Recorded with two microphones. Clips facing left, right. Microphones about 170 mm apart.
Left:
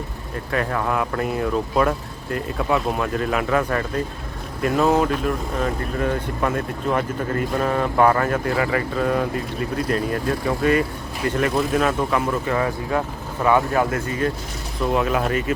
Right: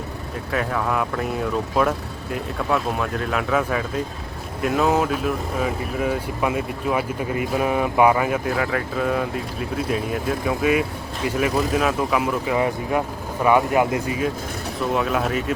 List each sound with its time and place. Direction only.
0.5 s speech: centre (ahead or behind)
12.5 s speech: 15° right (ahead or behind)
14.8 s speech: centre (ahead or behind)